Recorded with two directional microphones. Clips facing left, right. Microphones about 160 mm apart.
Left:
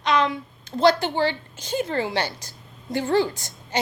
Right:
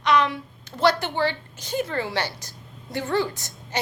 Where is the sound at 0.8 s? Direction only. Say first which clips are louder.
Left 2 dB; 30° left (ahead or behind).